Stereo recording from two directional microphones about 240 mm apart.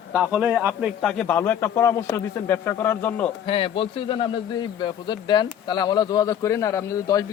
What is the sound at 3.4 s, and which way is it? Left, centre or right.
A man's voice, left.